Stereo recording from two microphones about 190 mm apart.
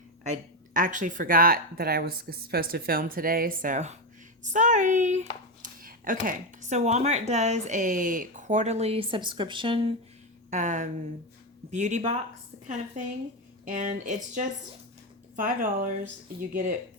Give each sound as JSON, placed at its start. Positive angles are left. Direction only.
{"t": 0.3, "sound": "speech", "side_deg": -45}
{"t": 10.5, "sound": "speech", "side_deg": -40}
{"t": 13.7, "sound": "speech", "side_deg": -45}
{"t": 15.4, "sound": "speech", "side_deg": -45}